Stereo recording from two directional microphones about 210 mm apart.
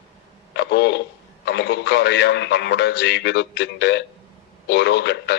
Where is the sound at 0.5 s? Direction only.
55° left (ahead or behind).